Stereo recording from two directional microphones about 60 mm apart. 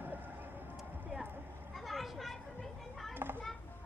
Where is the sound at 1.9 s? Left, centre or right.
Centre.